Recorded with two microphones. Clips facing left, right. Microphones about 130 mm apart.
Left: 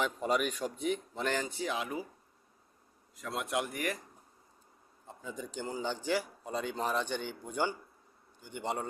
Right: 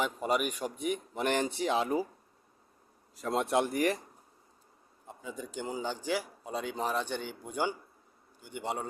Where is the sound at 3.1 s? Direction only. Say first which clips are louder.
Right 6 dB; 35° right (ahead or behind).